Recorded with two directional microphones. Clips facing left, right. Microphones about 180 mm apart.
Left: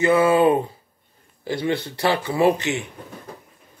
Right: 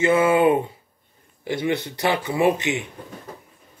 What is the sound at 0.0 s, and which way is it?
Speech, 20° right (ahead or behind).